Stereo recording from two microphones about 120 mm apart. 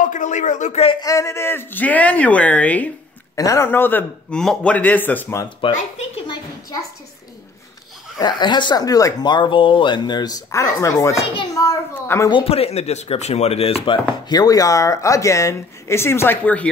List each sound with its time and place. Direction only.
0.0 s speech: 90° left
1.0 s speech: 25° left (ahead or behind)
3.3 s speech: 25° left (ahead or behind)
8.2 s speech: 40° left (ahead or behind)
12.3 s speech: 50° left (ahead or behind)
14.3 s speech: 30° left (ahead or behind); by 16.6 s 15° left (ahead or behind)